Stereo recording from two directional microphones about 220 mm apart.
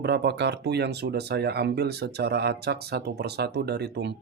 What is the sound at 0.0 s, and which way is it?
Speech, 50° right (ahead or behind).